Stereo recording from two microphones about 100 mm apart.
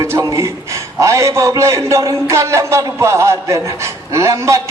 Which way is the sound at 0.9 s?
30° right (ahead or behind).